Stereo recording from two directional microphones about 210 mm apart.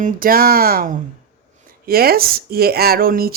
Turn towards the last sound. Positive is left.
turn(degrees=-45)  # may be behind; listen again after turning